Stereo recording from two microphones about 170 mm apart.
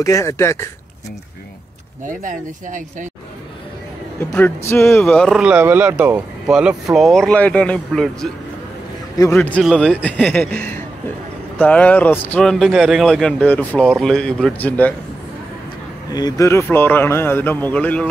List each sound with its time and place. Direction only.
0.0 s a man's voice: 20° left (ahead or behind)
2.0 s speech: 50° right (ahead or behind)
4.2 s a man's voice: 15° left (ahead or behind)
16.1 s a man's voice: 20° left (ahead or behind)